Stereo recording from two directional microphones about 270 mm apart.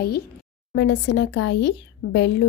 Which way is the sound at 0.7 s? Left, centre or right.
Left.